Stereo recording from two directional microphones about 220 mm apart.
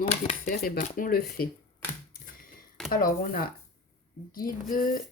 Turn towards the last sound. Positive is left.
turn(degrees=40)  # may be behind; listen again after turning